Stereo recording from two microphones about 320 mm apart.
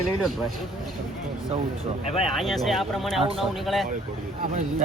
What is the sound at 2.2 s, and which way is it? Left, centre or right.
Speech, centre.